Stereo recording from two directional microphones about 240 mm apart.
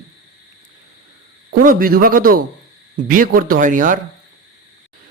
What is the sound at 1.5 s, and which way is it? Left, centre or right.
A man's voice, right.